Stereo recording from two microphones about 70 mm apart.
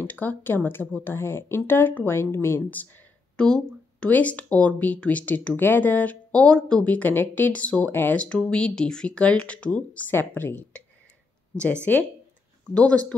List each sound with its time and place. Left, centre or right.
0.0 s speech: left
3.3 s speech: centre
10.1 s speech: left